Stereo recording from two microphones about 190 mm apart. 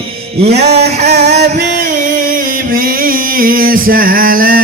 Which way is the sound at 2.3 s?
50° right (ahead or behind).